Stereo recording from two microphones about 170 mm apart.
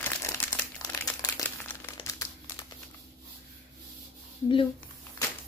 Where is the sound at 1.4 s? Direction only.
15° left (ahead or behind).